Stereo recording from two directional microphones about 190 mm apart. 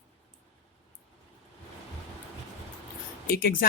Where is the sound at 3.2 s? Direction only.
50° left (ahead or behind).